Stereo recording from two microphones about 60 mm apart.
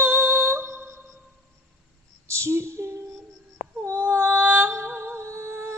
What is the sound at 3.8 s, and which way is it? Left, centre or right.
Music, right.